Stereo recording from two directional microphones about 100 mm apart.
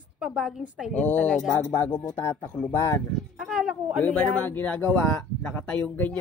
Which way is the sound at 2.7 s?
35° left (ahead or behind).